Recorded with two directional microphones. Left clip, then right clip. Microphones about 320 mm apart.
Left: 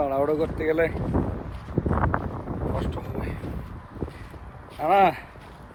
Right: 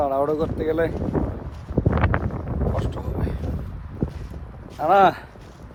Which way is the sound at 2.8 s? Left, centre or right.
Centre.